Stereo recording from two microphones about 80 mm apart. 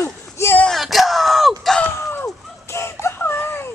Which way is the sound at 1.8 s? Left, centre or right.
Left.